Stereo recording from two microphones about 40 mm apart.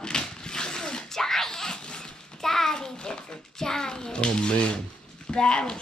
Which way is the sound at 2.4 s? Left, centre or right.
Centre.